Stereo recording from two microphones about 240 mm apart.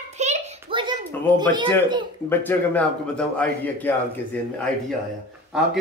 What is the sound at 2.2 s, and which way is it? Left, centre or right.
A man's voice, centre.